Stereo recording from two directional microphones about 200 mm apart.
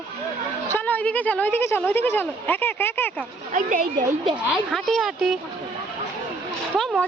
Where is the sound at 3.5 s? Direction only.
40° right (ahead or behind).